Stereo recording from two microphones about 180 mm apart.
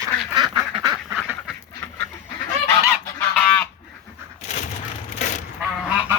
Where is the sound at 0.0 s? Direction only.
25° right (ahead or behind).